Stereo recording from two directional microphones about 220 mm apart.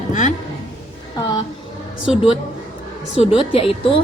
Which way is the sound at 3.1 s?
25° left (ahead or behind).